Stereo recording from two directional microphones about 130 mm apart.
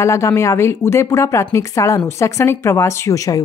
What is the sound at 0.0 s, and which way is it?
Speech, 20° left (ahead or behind).